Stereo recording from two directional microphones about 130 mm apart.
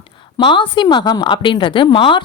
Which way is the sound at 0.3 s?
40° left (ahead or behind).